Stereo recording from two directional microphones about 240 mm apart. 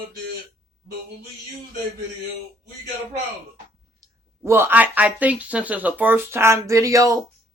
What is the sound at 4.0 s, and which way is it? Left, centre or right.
A woman's voice, centre.